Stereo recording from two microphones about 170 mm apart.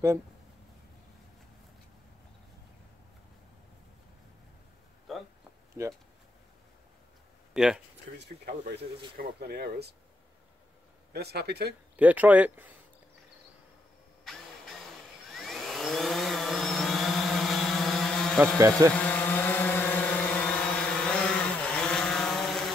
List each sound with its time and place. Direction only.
5.1 s a sound: centre (ahead or behind)
5.8 s speech: 20° right (ahead or behind)
7.5 s speech: 5° right (ahead or behind)
8.2 s speech: 70° right (ahead or behind)
11.1 s speech: 70° right (ahead or behind)
12.0 s speech: 10° right (ahead or behind)
14.2 s vacuum cleaner: centre (ahead or behind)
18.9 s vehicle: 10° left (ahead or behind)